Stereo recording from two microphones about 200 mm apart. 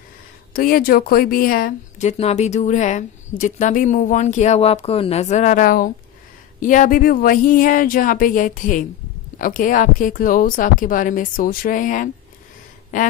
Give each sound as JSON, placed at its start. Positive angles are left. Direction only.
{"t": 0.5, "sound": "a woman's voice", "side_deg": 45}